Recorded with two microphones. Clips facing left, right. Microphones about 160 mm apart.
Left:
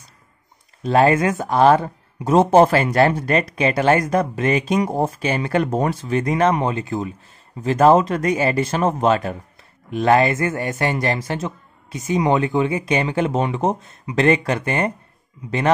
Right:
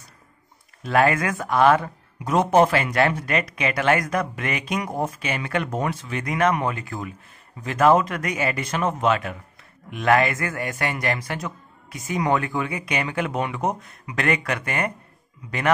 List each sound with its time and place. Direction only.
0.8 s speech: 30° left (ahead or behind)